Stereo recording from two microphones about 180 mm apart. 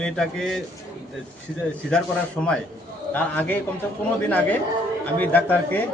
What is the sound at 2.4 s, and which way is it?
A man's voice, centre (ahead or behind).